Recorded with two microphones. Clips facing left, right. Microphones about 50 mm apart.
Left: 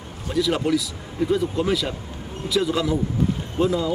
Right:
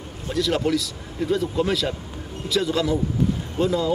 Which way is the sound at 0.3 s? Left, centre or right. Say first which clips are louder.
Left 1 dB; centre.